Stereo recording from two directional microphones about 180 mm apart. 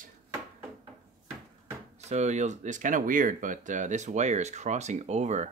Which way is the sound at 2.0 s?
35° right (ahead or behind).